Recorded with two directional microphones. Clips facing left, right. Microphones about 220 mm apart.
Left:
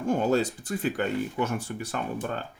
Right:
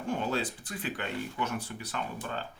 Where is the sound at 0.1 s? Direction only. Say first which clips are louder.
Left 8 dB; 45° left (ahead or behind).